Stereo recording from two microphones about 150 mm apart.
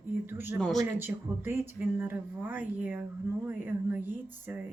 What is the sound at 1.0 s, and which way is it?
A man's voice, 15° right (ahead or behind).